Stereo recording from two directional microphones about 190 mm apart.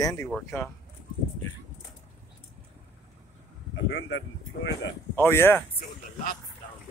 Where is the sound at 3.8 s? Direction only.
65° left (ahead or behind).